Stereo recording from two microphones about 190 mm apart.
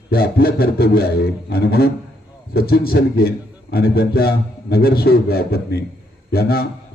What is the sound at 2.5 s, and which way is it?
A man's voice, 55° left (ahead or behind).